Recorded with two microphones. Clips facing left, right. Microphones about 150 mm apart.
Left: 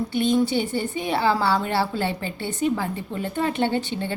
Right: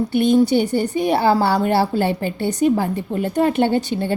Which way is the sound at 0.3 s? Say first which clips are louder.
Right 6 dB; 40° right (ahead or behind).